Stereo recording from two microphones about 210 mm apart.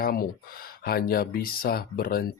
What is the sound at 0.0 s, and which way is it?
Speech, 45° left (ahead or behind).